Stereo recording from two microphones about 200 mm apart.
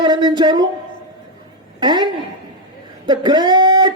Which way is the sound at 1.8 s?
20° right (ahead or behind).